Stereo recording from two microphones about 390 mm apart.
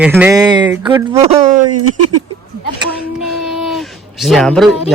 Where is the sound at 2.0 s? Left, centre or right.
Right.